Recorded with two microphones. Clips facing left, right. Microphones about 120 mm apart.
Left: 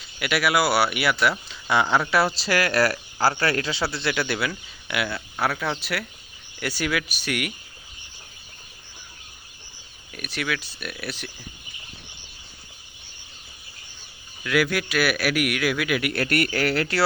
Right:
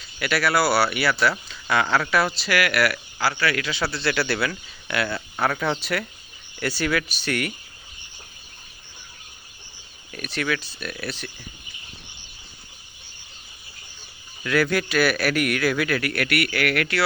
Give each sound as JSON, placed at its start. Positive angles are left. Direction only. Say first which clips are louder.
{"t": 0.2, "sound": "speech", "louder": "even", "side_deg": 15}
{"t": 2.3, "sound": "speech", "louder": "even", "side_deg": 35}
{"t": 4.3, "sound": "speech", "louder": "right 2 dB", "side_deg": 10}
{"t": 10.1, "sound": "speech", "louder": "right 3 dB", "side_deg": 10}
{"t": 14.4, "sound": "speech", "louder": "right 1 dB", "side_deg": 5}
{"t": 16.1, "sound": "speech", "louder": "left 1 dB", "side_deg": 35}